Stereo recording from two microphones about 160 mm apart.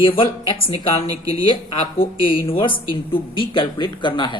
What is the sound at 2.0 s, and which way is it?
Speech, 35° left (ahead or behind).